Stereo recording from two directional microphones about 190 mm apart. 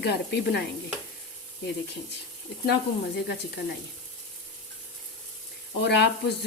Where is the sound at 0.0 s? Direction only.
60° left (ahead or behind).